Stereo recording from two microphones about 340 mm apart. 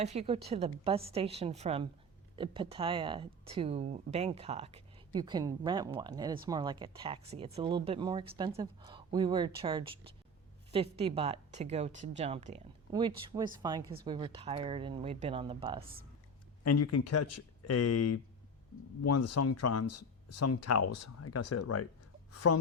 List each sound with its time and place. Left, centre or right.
0.0 s speech: centre
16.6 s speech: left